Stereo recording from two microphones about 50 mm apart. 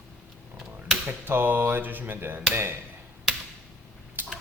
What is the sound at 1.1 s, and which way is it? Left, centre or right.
Cap gun, right.